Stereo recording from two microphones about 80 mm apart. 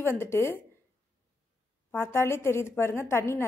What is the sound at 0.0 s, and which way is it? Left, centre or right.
Speech, left.